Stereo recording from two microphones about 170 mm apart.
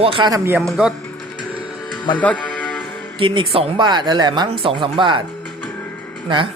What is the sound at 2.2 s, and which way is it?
Music, 10° left (ahead or behind).